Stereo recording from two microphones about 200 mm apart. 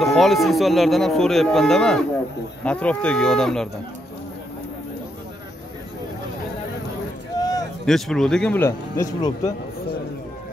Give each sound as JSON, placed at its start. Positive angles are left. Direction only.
{"t": 0.0, "sound": "speech", "side_deg": 0}
{"t": 7.3, "sound": "a sound", "side_deg": 20}
{"t": 7.8, "sound": "speech", "side_deg": 0}